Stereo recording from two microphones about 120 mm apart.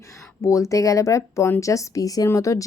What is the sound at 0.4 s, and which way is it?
Speech, 25° left (ahead or behind).